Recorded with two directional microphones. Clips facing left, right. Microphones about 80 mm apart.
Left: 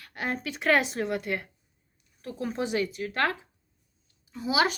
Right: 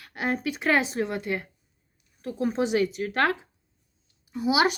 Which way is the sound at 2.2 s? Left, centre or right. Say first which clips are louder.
Right 5 dB; centre.